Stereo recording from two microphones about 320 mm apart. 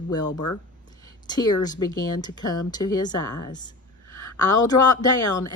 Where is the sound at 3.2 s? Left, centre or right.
Left.